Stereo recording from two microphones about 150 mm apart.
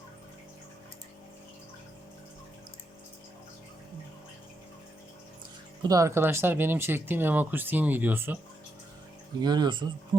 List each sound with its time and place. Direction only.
5.8 s speech: 20° right (ahead or behind)
9.4 s speech: 30° right (ahead or behind)